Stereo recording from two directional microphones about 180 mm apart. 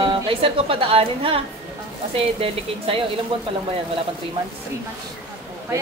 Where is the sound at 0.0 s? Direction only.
30° right (ahead or behind).